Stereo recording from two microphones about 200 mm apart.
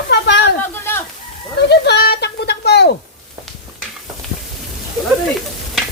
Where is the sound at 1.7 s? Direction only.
55° left (ahead or behind).